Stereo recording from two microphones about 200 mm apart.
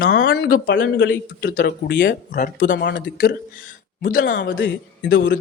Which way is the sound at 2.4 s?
40° left (ahead or behind).